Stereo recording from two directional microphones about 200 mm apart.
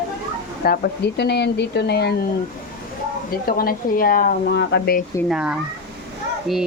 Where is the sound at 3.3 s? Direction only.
45° left (ahead or behind).